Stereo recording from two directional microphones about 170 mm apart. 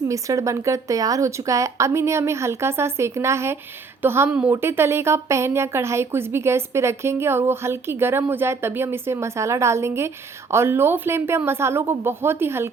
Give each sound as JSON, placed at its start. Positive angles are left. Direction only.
{"t": 0.1, "sound": "speech", "side_deg": -20}